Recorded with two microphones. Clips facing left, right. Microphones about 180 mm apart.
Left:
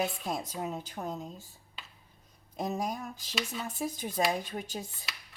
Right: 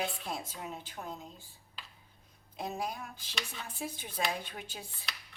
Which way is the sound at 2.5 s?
45° left (ahead or behind).